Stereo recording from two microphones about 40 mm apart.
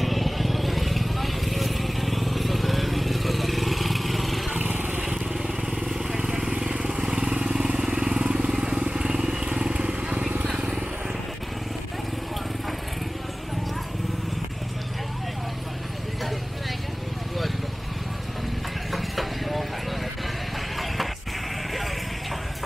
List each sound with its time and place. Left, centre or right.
0.0 s vehicle: centre
4.6 s vehicle: right
6.1 s vehicle: centre
18.9 s clip-clop: centre